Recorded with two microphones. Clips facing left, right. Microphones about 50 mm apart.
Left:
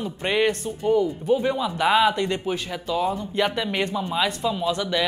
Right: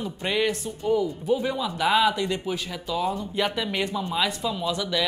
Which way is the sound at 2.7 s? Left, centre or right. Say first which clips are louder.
Left 3 dB; centre.